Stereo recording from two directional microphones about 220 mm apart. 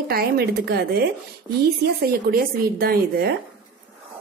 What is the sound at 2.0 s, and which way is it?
A woman's voice, 45° right (ahead or behind).